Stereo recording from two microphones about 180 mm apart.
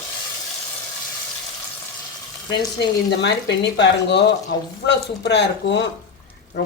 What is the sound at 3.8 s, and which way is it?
Speech, 75° left (ahead or behind).